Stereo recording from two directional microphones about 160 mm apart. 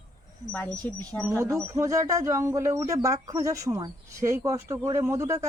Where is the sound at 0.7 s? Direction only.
20° right (ahead or behind).